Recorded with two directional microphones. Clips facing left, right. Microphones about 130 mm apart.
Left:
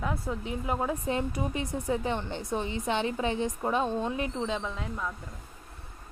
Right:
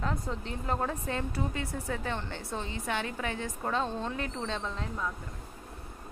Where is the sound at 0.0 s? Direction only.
5° left (ahead or behind).